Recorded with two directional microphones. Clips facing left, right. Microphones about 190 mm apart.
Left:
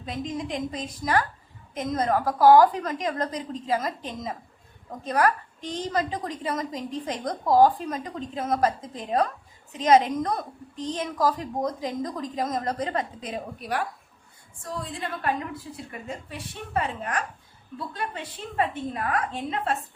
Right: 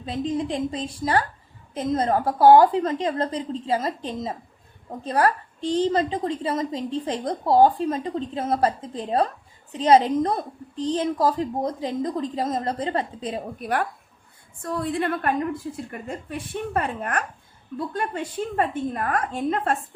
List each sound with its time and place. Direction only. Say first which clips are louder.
0.0 s a woman's voice: right 5 dB; 30° right (ahead or behind)
13.6 s a woman's voice: right 4 dB; 55° right (ahead or behind)